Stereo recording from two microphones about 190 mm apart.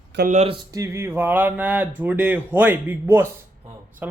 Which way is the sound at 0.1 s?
65° right (ahead or behind).